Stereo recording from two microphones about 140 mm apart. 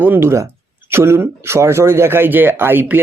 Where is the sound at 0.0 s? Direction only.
15° right (ahead or behind).